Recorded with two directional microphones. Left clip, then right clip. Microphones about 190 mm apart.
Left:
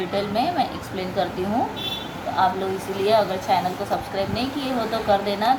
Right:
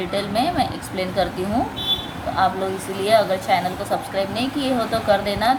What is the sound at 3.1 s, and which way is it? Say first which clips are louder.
A woman's voice: right 3 dB; 25° right (ahead or behind).